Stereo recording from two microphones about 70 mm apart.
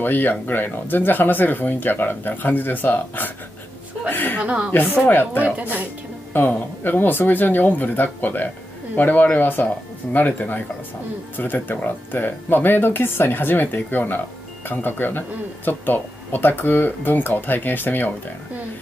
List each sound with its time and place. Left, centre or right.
0.0 s speech: left
4.1 s chuckle: left
4.4 s speech: centre
5.0 s speech: left
5.4 s speech: right
6.3 s speech: left